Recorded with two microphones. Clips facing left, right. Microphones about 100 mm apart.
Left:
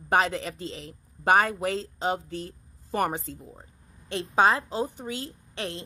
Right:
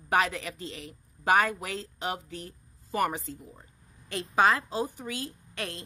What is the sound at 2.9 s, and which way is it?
Speech, 30° left (ahead or behind).